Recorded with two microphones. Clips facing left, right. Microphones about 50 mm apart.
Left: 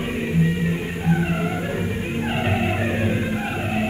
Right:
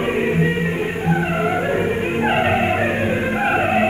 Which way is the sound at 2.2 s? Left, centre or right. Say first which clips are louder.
Right 6 dB; right.